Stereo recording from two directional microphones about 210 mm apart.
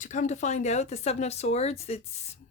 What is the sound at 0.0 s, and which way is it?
Speech, 35° left (ahead or behind).